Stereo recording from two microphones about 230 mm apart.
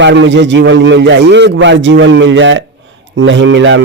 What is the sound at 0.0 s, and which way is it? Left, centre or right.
A man's voice, right.